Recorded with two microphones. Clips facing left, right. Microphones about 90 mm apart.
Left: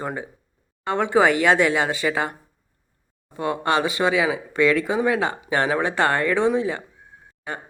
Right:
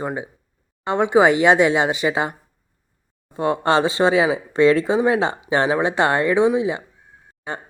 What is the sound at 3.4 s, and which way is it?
Speech, 30° right (ahead or behind).